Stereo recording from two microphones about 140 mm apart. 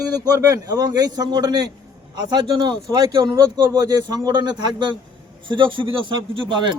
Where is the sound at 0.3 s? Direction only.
25° right (ahead or behind).